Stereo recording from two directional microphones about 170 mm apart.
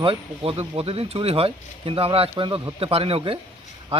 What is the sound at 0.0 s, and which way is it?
Speech, 35° right (ahead or behind).